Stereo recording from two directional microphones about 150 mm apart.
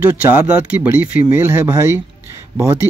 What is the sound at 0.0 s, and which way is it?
Speech, 10° right (ahead or behind).